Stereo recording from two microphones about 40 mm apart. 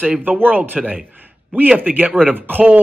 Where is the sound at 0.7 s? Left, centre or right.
Right.